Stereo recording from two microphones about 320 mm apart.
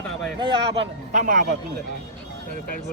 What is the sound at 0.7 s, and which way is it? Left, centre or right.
Speech, right.